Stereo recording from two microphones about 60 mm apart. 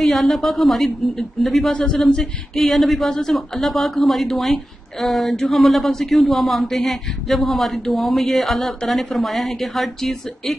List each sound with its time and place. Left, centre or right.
0.0 s speech: centre
1.7 s speech: centre